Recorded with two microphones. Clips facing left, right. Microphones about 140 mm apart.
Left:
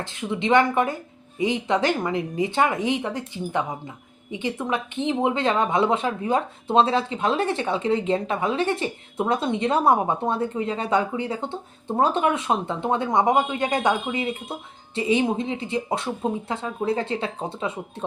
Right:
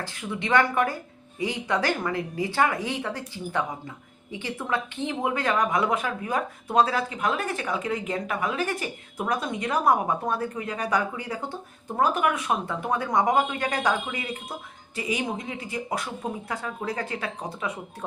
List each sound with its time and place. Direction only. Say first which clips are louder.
0.0 s speech: left 5 dB; 20° left (ahead or behind)